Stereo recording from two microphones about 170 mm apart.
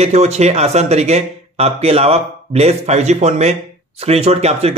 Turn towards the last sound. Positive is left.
turn(degrees=-35)  # may be behind; listen again after turning